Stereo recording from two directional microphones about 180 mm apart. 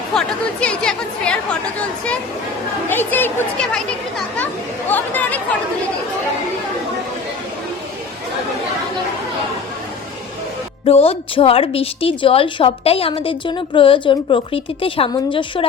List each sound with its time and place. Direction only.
0.1 s speech: 5° left (ahead or behind)
2.9 s speech: 10° left (ahead or behind)
4.9 s speech: 10° left (ahead or behind)
10.8 s a woman's voice: 35° left (ahead or behind)